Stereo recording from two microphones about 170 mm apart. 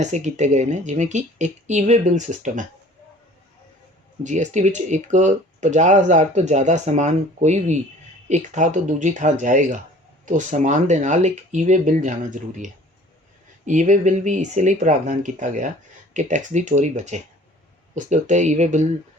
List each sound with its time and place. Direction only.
0.0 s speech: 45° right (ahead or behind)
4.2 s speech: 45° right (ahead or behind)